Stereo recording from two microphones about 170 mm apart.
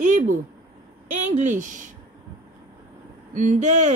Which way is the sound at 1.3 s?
45° right (ahead or behind).